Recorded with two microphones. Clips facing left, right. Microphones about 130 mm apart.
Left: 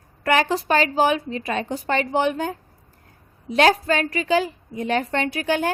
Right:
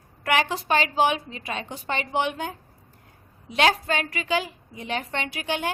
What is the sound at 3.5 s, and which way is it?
A woman's voice, 40° left (ahead or behind).